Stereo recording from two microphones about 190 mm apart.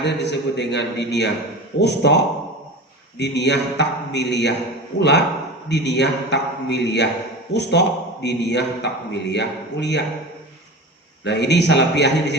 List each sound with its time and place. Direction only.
0.0 s a man's voice: 65° left (ahead or behind)
11.2 s a man's voice: 65° left (ahead or behind)